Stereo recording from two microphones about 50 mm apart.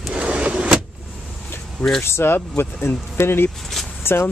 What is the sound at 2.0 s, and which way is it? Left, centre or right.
Speech, left.